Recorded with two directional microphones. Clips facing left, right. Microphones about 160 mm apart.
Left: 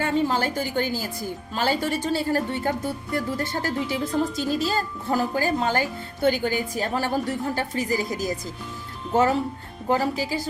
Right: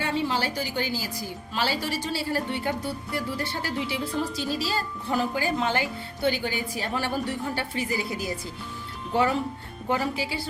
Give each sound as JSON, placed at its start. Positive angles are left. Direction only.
{"t": 0.0, "sound": "a woman's voice", "side_deg": 45}